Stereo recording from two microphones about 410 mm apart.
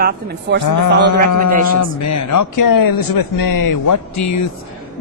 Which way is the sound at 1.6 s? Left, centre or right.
Left.